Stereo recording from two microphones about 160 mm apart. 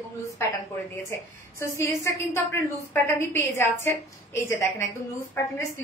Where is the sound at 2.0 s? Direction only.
15° left (ahead or behind).